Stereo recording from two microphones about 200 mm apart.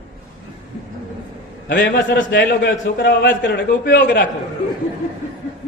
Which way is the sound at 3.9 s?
60° left (ahead or behind).